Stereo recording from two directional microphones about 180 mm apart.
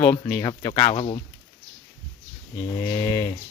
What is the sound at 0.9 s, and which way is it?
Speech, 35° left (ahead or behind).